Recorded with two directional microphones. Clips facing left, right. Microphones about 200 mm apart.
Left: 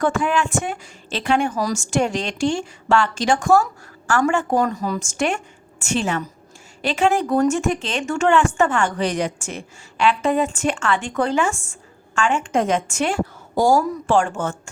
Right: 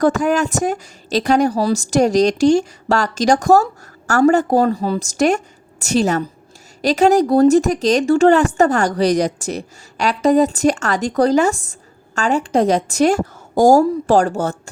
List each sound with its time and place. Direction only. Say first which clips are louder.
0.0 s speech: right 5 dB; 40° right (ahead or behind)